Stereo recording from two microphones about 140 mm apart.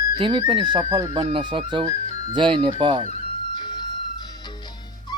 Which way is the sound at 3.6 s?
30° left (ahead or behind).